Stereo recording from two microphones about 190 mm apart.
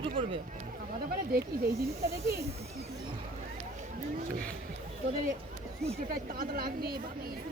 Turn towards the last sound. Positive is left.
turn(degrees=-50)  # may be behind; listen again after turning